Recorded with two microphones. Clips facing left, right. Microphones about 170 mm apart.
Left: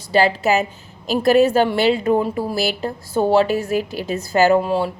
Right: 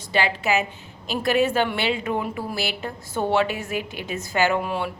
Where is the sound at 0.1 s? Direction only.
40° left (ahead or behind).